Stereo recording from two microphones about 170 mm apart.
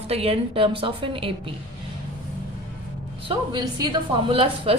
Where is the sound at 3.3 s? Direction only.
25° right (ahead or behind).